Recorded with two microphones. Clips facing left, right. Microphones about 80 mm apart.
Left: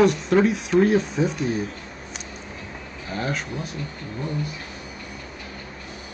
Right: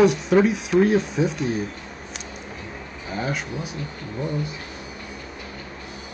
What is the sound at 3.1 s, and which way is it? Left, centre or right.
Speech, centre.